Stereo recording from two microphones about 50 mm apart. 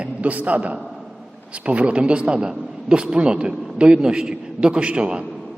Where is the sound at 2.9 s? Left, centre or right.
Centre.